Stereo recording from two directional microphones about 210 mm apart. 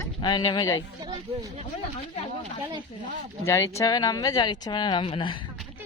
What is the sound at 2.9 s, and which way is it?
Speech, 30° left (ahead or behind).